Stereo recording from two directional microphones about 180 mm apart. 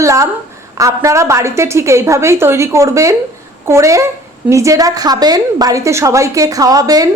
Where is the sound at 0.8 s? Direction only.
15° right (ahead or behind).